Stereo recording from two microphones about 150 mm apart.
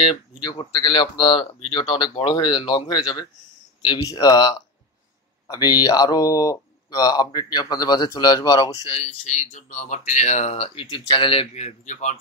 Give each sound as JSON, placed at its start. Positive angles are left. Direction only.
{"t": 0.0, "sound": "speech", "side_deg": 35}
{"t": 8.8, "sound": "speech", "side_deg": 45}